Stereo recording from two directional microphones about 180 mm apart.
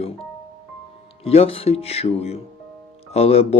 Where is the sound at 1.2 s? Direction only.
35° left (ahead or behind).